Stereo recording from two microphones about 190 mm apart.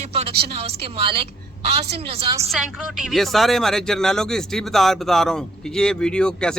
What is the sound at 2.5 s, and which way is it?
Speech, centre (ahead or behind).